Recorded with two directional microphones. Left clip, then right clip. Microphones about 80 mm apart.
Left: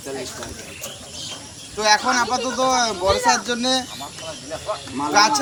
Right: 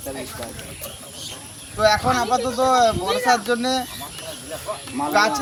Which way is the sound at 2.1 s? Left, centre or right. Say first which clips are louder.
Even; right.